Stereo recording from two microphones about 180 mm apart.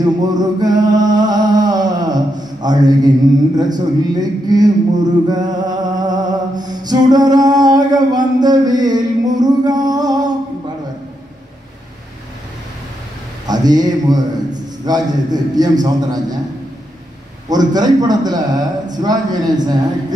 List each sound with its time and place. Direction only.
0.0 s music: 20° right (ahead or behind)
3.5 s a man's voice: 20° right (ahead or behind)
5.3 s music: 20° right (ahead or behind)
13.5 s a man's voice: 20° right (ahead or behind)
17.5 s a man's voice: 20° right (ahead or behind)